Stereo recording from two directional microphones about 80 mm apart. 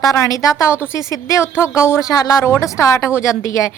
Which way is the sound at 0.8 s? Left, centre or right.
Left.